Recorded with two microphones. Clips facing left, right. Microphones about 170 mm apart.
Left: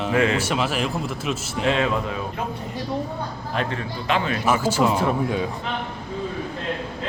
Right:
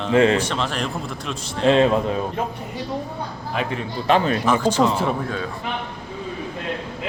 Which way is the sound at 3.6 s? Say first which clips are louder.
Even; 5° right (ahead or behind).